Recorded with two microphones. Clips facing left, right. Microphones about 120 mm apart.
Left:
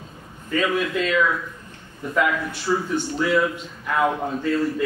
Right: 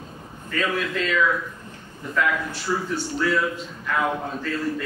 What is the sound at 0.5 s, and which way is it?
Speech, 15° left (ahead or behind).